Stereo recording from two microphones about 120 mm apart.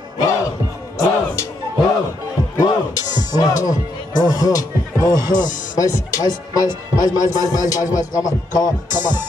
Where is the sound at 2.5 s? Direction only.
30° left (ahead or behind).